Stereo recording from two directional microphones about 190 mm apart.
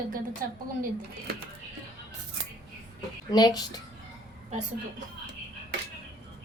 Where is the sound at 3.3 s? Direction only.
20° left (ahead or behind).